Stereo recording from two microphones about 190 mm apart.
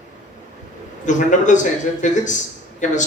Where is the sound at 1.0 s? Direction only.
40° left (ahead or behind).